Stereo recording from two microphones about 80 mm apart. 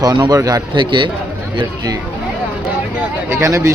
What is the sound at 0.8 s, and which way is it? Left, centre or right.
Speech, right.